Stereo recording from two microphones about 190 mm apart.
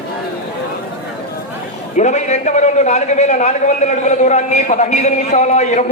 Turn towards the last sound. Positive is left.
turn(degrees=35)  # may be behind; listen again after turning